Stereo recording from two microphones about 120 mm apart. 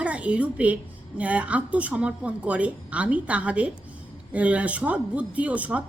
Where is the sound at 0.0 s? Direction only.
10° right (ahead or behind).